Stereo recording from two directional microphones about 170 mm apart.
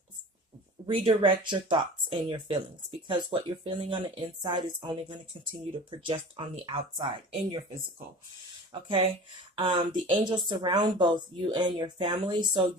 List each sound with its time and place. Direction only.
0.9 s speech: 30° right (ahead or behind)
9.6 s speech: 30° right (ahead or behind)